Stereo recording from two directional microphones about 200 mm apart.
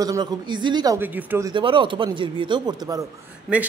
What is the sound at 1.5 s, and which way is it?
Speech, 25° right (ahead or behind).